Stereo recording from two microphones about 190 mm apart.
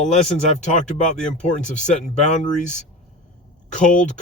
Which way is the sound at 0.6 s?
40° left (ahead or behind).